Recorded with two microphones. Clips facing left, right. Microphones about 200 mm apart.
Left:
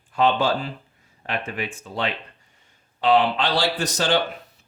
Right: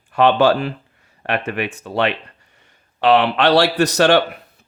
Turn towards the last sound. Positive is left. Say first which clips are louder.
# right 8 dB
turn(degrees=-65)  # may be behind; listen again after turning